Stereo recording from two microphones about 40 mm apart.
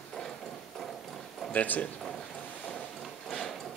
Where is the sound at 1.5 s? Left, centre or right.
Left.